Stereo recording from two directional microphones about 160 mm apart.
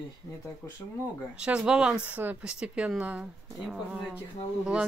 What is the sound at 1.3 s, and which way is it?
Speech, 5° right (ahead or behind).